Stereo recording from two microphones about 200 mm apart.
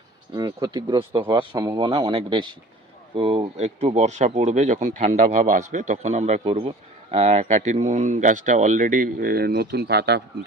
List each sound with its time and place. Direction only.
0.3 s speech: 20° right (ahead or behind); by 10.2 s 55° right (ahead or behind)